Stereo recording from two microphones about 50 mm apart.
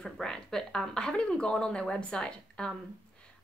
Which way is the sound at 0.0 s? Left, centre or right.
Centre.